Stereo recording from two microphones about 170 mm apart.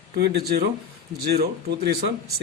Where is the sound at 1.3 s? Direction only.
70° right (ahead or behind).